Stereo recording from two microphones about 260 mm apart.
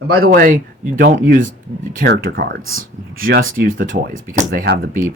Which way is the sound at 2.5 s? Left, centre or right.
Right.